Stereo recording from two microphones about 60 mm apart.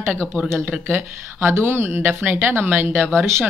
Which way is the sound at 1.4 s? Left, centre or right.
Right.